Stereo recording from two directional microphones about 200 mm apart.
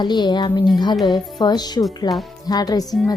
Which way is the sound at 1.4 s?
20° left (ahead or behind).